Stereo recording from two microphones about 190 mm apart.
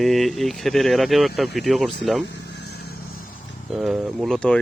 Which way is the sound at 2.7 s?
55° left (ahead or behind).